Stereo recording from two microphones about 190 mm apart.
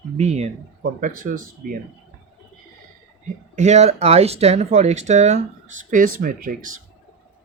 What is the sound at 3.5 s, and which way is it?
Speech, 35° right (ahead or behind).